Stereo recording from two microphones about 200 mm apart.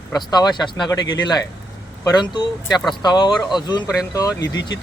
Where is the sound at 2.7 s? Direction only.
Centre (ahead or behind).